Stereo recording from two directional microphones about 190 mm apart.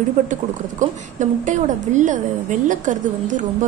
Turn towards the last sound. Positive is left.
turn(degrees=-40)  # may be behind; listen again after turning